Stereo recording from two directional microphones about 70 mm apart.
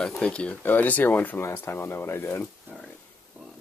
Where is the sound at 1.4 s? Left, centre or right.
Left.